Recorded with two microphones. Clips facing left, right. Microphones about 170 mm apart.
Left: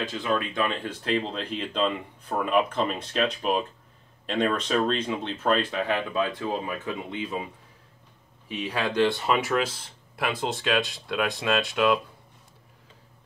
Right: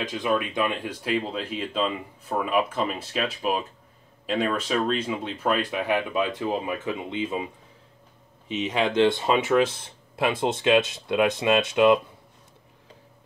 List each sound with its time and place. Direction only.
0.0 s speech: 15° right (ahead or behind)
8.5 s speech: 20° right (ahead or behind)